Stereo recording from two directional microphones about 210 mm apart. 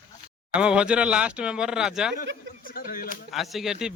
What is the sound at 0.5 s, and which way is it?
Speech, 5° right (ahead or behind).